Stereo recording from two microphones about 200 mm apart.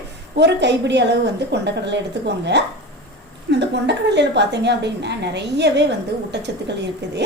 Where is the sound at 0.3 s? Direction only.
60° right (ahead or behind).